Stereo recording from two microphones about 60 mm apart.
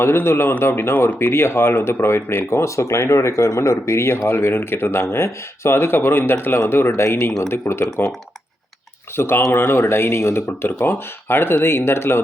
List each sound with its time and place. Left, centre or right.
0.0 s speech: left
9.1 s speech: left